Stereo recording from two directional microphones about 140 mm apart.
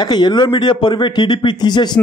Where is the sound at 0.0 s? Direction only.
30° left (ahead or behind).